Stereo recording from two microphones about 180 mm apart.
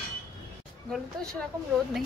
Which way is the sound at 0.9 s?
5° left (ahead or behind).